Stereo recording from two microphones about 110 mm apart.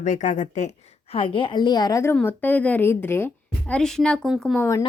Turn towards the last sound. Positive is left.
turn(degrees=0)  # may be behind; listen again after turning